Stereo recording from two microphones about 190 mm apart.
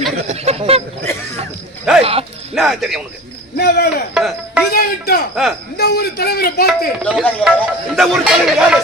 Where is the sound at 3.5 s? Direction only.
55° left (ahead or behind).